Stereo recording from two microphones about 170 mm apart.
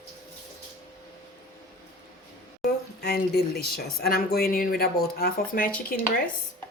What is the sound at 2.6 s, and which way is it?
A woman's voice, 70° left (ahead or behind).